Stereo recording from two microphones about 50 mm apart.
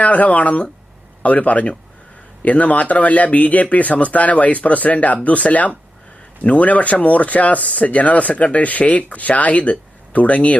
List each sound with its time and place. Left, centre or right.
0.0 s speech: left